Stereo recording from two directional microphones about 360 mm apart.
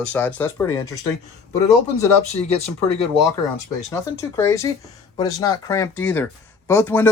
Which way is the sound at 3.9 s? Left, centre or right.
Centre.